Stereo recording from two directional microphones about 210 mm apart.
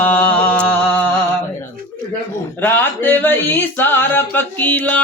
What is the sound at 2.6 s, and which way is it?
Speech, 10° left (ahead or behind).